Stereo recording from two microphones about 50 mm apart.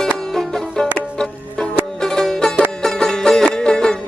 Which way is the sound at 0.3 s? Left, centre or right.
Centre.